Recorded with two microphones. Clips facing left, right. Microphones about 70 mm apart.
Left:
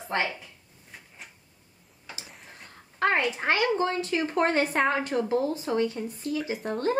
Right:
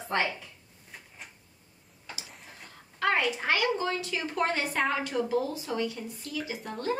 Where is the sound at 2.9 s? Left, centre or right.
Left.